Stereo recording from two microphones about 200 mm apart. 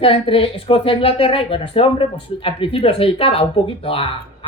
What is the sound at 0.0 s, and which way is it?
Speech, 25° left (ahead or behind).